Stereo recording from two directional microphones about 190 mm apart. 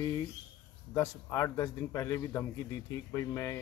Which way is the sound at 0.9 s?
15° left (ahead or behind).